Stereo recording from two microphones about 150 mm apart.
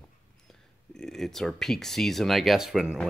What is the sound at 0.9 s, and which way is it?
Speech, 5° left (ahead or behind).